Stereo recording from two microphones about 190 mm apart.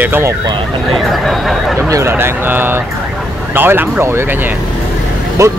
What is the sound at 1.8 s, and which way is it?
Speech, 15° right (ahead or behind).